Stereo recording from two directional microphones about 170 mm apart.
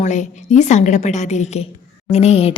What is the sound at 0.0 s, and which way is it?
A woman's voice, 45° left (ahead or behind).